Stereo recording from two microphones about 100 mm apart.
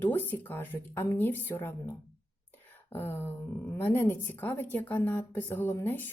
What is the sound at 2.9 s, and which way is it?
Speech, 20° left (ahead or behind).